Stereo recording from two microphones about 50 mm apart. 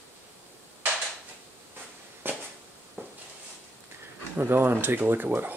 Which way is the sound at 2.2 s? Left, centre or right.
Right.